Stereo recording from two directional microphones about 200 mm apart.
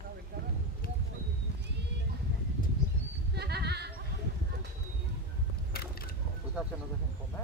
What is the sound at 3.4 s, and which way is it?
Sheep, 55° right (ahead or behind).